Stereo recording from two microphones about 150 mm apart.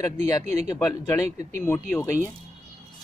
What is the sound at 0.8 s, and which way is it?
Speech, 20° left (ahead or behind).